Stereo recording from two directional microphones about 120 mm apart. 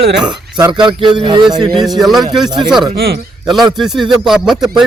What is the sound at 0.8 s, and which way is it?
Speech, 40° right (ahead or behind).